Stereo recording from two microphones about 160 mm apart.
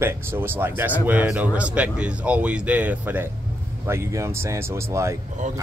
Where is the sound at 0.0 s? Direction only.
15° right (ahead or behind).